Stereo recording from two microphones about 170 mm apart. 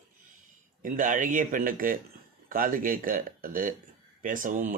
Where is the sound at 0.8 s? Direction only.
50° right (ahead or behind).